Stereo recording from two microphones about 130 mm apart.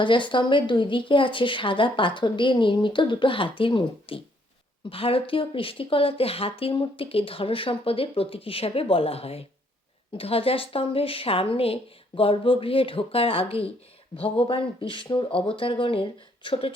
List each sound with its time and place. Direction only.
0.0 s speech: 40° left (ahead or behind)